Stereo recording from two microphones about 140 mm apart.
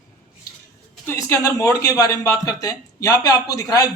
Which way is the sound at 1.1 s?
20° left (ahead or behind).